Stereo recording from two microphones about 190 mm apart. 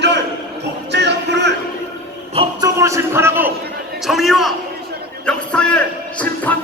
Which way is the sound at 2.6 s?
15° right (ahead or behind).